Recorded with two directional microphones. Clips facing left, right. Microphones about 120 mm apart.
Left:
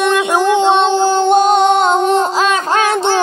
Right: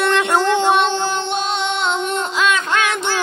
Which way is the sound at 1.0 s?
40° left (ahead or behind).